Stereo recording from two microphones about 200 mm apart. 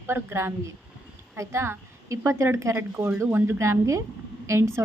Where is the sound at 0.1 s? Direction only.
10° right (ahead or behind).